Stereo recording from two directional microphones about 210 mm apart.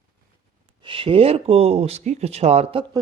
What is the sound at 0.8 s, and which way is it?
Speech, 25° right (ahead or behind).